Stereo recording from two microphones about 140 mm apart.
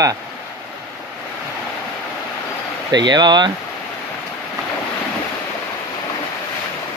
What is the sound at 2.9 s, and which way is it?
Speech, 30° right (ahead or behind).